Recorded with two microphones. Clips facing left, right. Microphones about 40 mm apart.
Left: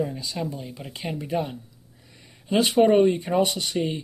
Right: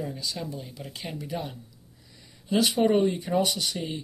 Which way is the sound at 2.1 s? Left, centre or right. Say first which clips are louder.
Left 2 dB; left.